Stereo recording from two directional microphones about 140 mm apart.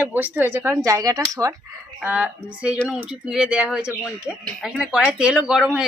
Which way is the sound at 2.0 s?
10° right (ahead or behind).